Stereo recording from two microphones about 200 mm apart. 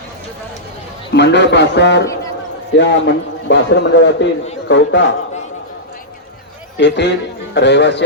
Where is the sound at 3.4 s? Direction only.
60° left (ahead or behind).